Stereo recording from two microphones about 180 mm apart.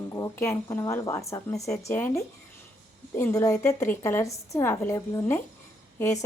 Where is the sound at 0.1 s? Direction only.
15° left (ahead or behind).